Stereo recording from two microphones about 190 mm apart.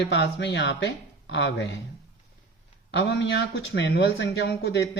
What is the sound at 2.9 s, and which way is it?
Speech, 65° left (ahead or behind).